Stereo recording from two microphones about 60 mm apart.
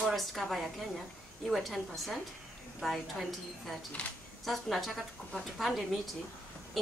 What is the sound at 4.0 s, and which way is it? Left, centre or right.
Speech, left.